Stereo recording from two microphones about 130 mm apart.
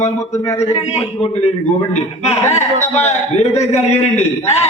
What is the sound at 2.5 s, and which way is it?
A man's voice, 60° left (ahead or behind).